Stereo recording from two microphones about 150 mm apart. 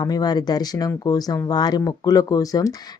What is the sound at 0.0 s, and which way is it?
A woman's voice, 25° left (ahead or behind).